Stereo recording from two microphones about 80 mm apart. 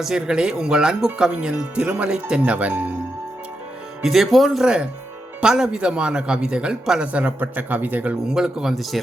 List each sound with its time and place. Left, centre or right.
0.0 s speech: centre
4.0 s speech: centre